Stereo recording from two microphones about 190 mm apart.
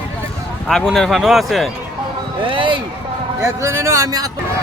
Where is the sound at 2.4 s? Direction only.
25° right (ahead or behind).